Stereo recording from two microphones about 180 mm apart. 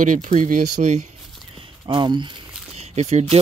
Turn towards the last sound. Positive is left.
turn(degrees=-40)  # may be behind; listen again after turning